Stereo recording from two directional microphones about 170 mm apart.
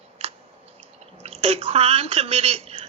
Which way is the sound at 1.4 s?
35° right (ahead or behind).